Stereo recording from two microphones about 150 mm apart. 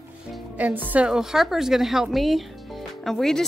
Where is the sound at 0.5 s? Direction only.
10° right (ahead or behind).